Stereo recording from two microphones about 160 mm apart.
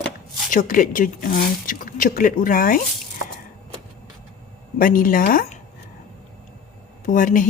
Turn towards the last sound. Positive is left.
turn(degrees=55)  # may be behind; listen again after turning